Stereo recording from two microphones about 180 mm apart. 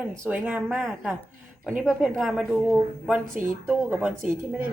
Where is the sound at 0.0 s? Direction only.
15° right (ahead or behind).